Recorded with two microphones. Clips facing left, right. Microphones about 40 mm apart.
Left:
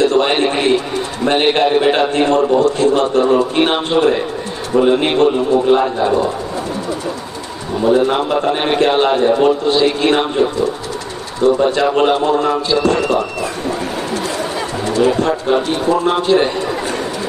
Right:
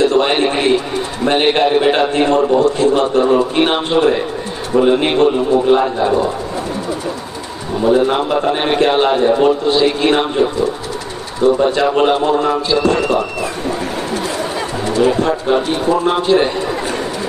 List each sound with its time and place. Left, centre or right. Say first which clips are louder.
0.0 s a sound: even; centre
1.2 s a man's voice: even; centre
7.8 s speech: even; centre
11.5 s speech: even; centre
15.1 s a man's voice: even; centre